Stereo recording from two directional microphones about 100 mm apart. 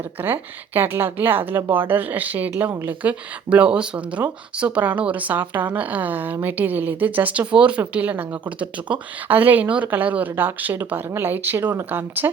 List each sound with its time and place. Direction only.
0.2 s a woman's voice: 20° right (ahead or behind)